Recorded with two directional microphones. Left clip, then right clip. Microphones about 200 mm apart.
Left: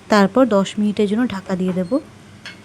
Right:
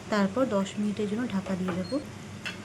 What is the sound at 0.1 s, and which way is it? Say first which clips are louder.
Speech: left 13 dB; 45° left (ahead or behind).